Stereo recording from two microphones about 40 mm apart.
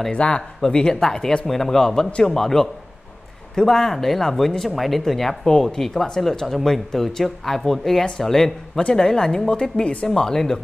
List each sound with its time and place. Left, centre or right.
0.1 s speech: left